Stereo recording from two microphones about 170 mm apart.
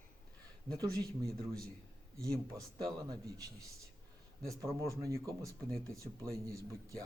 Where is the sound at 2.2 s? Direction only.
20° right (ahead or behind).